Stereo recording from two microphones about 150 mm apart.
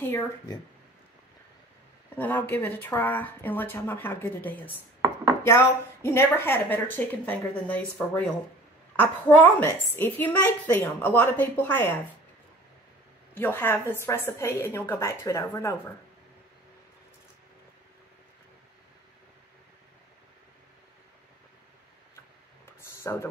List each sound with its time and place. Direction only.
2.1 s a woman's voice: 15° left (ahead or behind)
13.3 s a woman's voice: 15° left (ahead or behind)
23.0 s speech: 20° left (ahead or behind)